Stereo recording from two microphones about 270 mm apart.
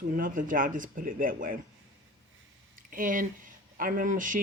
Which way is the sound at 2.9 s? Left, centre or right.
Right.